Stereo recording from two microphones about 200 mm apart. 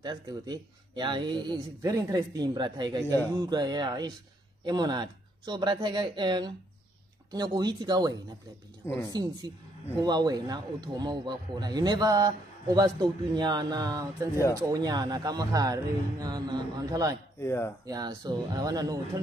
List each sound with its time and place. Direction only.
0.0 s speech: 20° right (ahead or behind)
8.8 s speech: 10° left (ahead or behind)
9.1 s speech: 20° right (ahead or behind)
17.4 s speech: 10° left (ahead or behind)
17.8 s speech: 20° right (ahead or behind)